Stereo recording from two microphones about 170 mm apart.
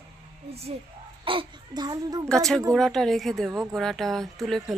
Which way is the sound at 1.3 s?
25° right (ahead or behind).